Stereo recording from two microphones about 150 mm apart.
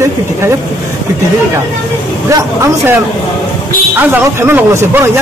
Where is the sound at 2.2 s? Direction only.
20° right (ahead or behind).